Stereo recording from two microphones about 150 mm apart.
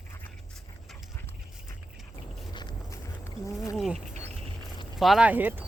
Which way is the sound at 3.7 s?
5° right (ahead or behind).